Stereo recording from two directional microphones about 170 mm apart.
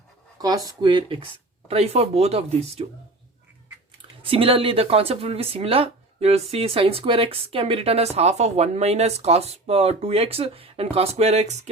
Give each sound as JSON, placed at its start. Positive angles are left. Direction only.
{"t": 0.3, "sound": "speech", "side_deg": -20}
{"t": 4.2, "sound": "speech", "side_deg": -30}